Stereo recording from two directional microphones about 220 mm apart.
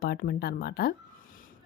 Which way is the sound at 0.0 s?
45° left (ahead or behind).